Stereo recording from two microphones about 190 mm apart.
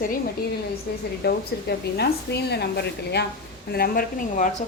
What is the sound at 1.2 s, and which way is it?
A woman's voice, 60° left (ahead or behind).